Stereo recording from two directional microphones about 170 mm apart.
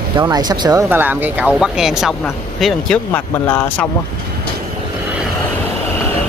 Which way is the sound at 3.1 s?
10° left (ahead or behind).